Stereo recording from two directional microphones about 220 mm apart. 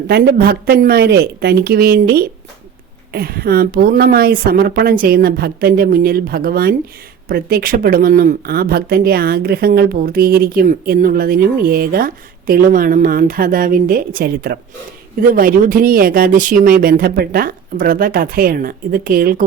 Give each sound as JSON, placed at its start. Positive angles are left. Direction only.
{"t": 0.1, "sound": "a woman's voice", "side_deg": -45}